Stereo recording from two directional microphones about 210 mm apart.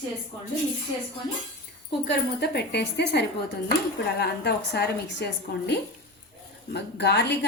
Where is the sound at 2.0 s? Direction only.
55° left (ahead or behind).